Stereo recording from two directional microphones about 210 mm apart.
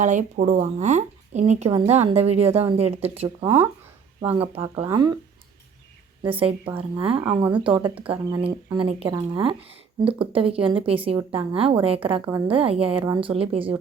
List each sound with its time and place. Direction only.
0.0 s speech: 35° right (ahead or behind); by 5.1 s 20° right (ahead or behind)
6.3 s speech: 25° right (ahead or behind)